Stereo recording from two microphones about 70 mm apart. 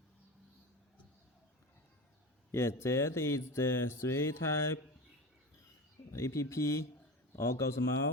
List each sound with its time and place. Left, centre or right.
2.5 s speech: left
6.1 s speech: left